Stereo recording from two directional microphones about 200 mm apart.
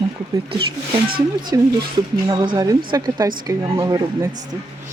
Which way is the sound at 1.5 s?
15° right (ahead or behind).